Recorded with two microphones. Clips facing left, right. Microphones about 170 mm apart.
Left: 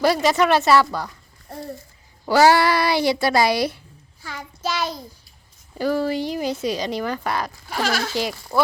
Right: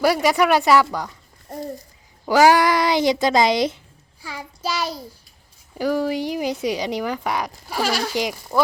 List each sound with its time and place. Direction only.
0.0 s speech: 10° right (ahead or behind)
2.2 s speech: 10° right (ahead or behind)
4.2 s child singing: 10° right (ahead or behind)
5.7 s speech: 10° right (ahead or behind)